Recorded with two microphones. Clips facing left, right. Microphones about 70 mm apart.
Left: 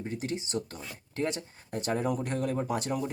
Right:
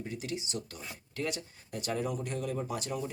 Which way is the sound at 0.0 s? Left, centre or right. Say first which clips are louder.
Left 4 dB; left.